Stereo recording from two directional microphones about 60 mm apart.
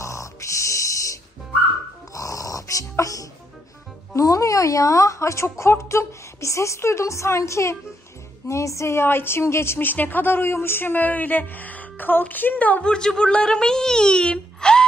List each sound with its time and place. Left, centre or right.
0.0 s a sound: left
2.1 s dog: left
4.1 s a woman's voice: left; by 14.9 s centre